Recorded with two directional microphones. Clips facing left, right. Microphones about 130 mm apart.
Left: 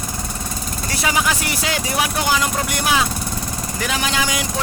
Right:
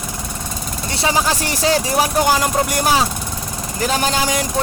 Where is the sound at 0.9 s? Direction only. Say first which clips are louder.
Right 2 dB; 30° right (ahead or behind).